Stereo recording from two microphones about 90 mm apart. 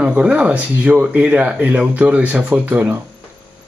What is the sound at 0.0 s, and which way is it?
Speech, 15° right (ahead or behind).